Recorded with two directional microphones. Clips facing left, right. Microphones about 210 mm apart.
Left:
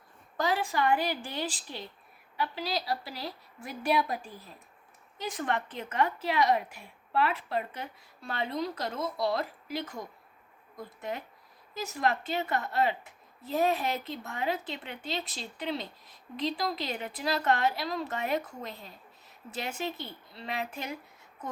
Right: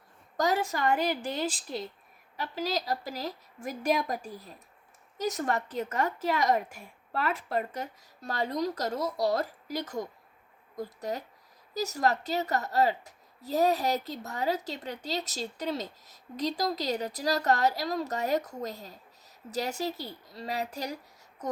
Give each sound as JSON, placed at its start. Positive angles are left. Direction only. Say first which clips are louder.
{"t": 0.3, "sound": "a woman's voice", "louder": "right 1 dB", "side_deg": -40}